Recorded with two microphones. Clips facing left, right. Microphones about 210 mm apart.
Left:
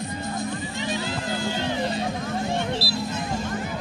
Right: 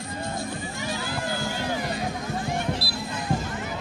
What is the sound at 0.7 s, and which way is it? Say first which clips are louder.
Music: left 2 dB; 20° left (ahead or behind).